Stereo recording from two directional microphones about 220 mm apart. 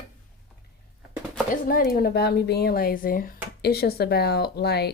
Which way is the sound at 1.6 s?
40° left (ahead or behind).